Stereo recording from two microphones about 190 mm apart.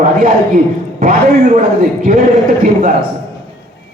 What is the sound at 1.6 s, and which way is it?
A man's voice, 45° right (ahead or behind).